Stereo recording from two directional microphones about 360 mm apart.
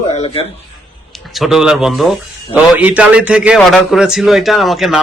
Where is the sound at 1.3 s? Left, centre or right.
Centre.